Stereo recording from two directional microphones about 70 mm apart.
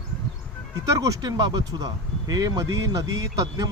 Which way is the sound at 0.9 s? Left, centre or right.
Right.